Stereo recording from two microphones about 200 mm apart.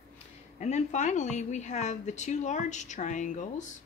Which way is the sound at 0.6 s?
35° left (ahead or behind).